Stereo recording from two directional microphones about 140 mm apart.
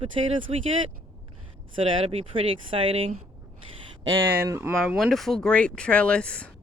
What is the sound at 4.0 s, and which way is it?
Speech, 25° right (ahead or behind).